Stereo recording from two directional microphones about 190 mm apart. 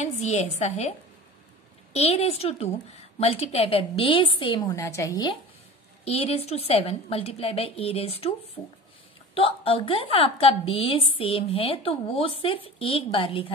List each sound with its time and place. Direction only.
0.0 s a woman's voice: 35° left (ahead or behind)
2.0 s a woman's voice: 35° left (ahead or behind)
4.7 s a woman's voice: 15° left (ahead or behind)
6.0 s a woman's voice: 30° left (ahead or behind)
8.6 s a woman's voice: 10° left (ahead or behind)
9.3 s speech: 30° left (ahead or behind)